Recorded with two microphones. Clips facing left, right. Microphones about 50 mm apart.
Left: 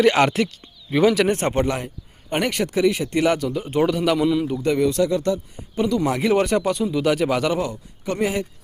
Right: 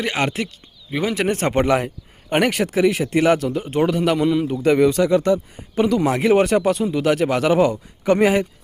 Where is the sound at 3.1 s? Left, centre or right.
Right.